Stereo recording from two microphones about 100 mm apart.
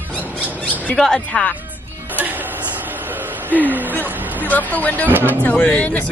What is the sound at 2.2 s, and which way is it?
Music, 20° right (ahead or behind).